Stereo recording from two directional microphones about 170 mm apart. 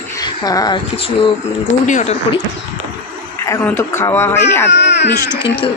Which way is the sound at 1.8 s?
45° left (ahead or behind).